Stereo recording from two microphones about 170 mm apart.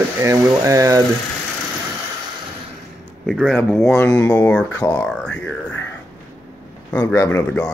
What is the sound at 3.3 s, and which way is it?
Speech, centre (ahead or behind).